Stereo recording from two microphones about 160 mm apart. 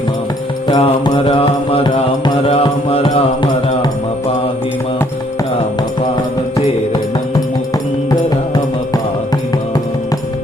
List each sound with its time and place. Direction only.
0.7 s mantra: 30° left (ahead or behind)